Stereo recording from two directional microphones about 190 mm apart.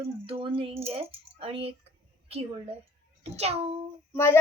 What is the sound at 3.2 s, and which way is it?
Speech, 35° right (ahead or behind).